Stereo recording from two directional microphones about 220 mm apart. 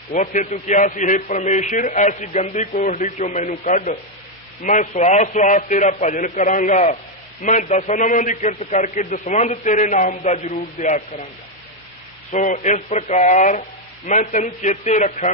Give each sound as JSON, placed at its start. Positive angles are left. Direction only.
{"t": 0.1, "sound": "a man's voice", "side_deg": 35}
{"t": 12.3, "sound": "a man's voice", "side_deg": 35}